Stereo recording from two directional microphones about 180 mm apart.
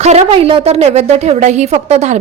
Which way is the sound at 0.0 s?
40° right (ahead or behind).